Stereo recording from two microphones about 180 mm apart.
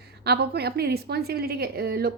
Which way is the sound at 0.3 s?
65° right (ahead or behind).